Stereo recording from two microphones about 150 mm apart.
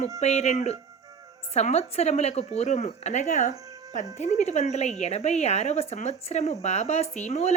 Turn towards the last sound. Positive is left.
turn(degrees=50)  # may be behind; listen again after turning